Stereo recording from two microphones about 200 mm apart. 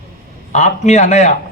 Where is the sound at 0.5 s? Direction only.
35° left (ahead or behind).